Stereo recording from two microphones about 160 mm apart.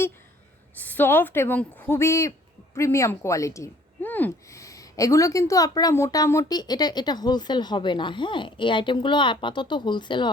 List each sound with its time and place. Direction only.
0.8 s speech: 10° left (ahead or behind); by 10.2 s 30° left (ahead or behind)